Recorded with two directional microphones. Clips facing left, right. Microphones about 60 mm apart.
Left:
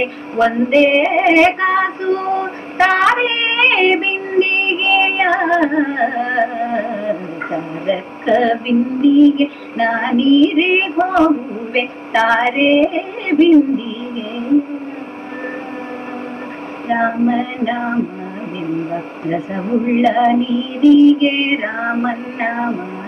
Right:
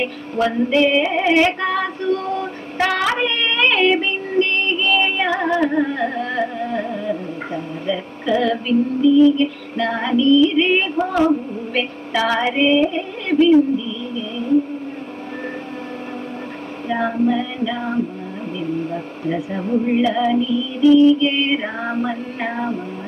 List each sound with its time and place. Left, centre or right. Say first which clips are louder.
0.0 s music: left 5 dB; left
16.8 s music: left 4 dB; left